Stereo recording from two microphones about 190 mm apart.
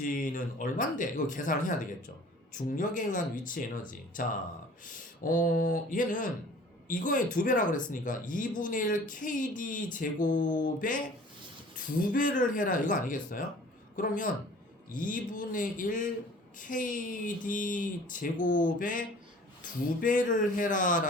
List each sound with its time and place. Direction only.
0.0 s a man's voice: 45° left (ahead or behind)
12.1 s a man's voice: 45° left (ahead or behind)